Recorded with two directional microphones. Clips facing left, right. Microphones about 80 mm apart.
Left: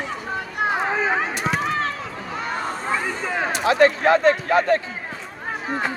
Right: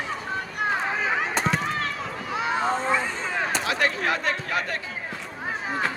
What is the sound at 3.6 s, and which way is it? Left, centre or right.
Speech, left.